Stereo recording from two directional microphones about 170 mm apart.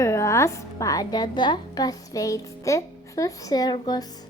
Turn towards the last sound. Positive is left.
turn(degrees=25)  # may be behind; listen again after turning